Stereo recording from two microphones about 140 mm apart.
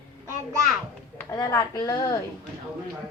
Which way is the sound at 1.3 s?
25° left (ahead or behind).